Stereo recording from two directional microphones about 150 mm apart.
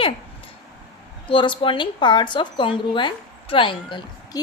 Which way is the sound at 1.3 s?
35° left (ahead or behind).